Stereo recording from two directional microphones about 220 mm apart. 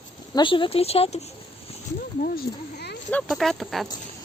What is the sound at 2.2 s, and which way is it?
Speech, 45° left (ahead or behind).